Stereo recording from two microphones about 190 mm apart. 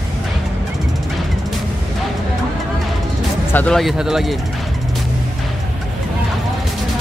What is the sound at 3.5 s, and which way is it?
Speech, 5° left (ahead or behind).